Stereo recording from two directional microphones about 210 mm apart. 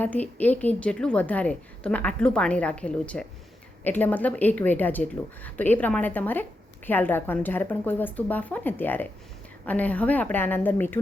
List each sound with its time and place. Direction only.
0.0 s a woman's voice: 5° left (ahead or behind)